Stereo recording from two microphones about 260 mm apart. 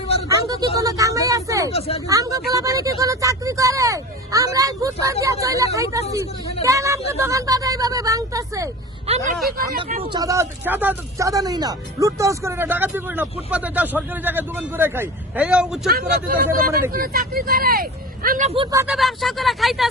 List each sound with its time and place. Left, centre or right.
0.8 s speech: centre
9.5 s speech: right
10.0 s speech: centre
16.0 s speech: right; by 18.9 s centre
18.9 s speech: centre